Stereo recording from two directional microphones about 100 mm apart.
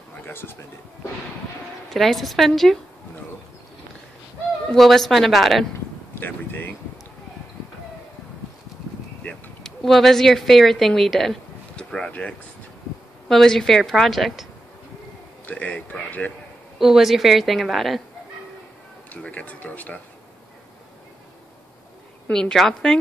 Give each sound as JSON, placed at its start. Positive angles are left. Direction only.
{"t": 0.2, "sound": "a man's voice", "side_deg": 20}
{"t": 1.9, "sound": "a woman's voice", "side_deg": 0}
{"t": 4.7, "sound": "a woman's voice", "side_deg": 0}
{"t": 6.1, "sound": "speech", "side_deg": 20}
{"t": 9.2, "sound": "a woman's voice", "side_deg": 5}
{"t": 15.4, "sound": "speech", "side_deg": 15}
{"t": 16.7, "sound": "a woman's voice", "side_deg": -5}
{"t": 19.2, "sound": "speech", "side_deg": 15}
{"t": 22.3, "sound": "a woman's voice", "side_deg": 5}